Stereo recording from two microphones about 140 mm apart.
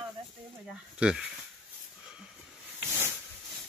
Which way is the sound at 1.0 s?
5° right (ahead or behind).